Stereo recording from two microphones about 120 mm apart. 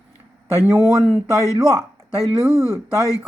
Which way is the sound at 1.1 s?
25° right (ahead or behind).